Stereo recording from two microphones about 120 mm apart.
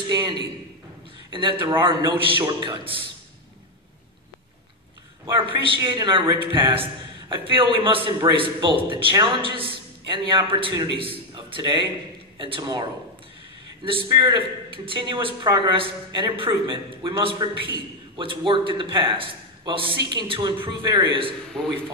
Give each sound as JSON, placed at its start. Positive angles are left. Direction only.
{"t": 0.1, "sound": "a man's voice", "side_deg": -35}
{"t": 5.2, "sound": "a man's voice", "side_deg": -45}
{"t": 5.8, "sound": "a man's voice", "side_deg": -35}
{"t": 13.8, "sound": "a man's voice", "side_deg": -45}
{"t": 21.5, "sound": "a man's voice", "side_deg": 5}